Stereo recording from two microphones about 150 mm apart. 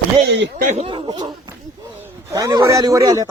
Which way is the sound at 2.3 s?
25° right (ahead or behind).